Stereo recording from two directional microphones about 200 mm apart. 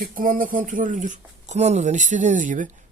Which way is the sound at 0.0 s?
45° right (ahead or behind).